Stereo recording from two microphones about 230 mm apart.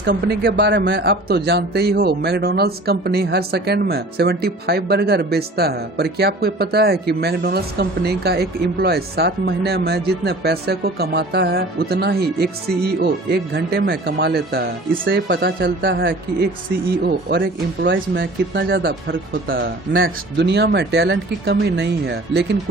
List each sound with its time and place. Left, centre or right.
0.0 s speech: right